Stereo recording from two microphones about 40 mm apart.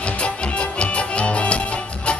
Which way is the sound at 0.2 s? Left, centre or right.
Left.